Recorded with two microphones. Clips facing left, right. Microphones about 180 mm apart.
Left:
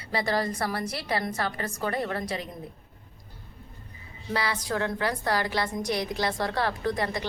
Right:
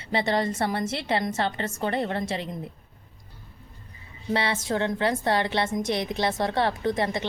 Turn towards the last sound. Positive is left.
turn(degrees=-25)  # may be behind; listen again after turning